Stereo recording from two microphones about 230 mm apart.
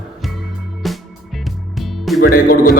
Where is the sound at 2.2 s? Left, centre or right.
Left.